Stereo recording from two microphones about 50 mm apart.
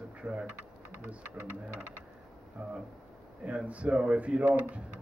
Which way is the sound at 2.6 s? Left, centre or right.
Right.